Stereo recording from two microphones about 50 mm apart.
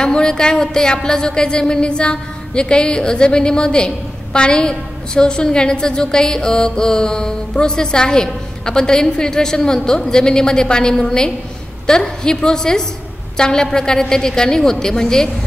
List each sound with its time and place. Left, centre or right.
0.0 s a woman's voice: centre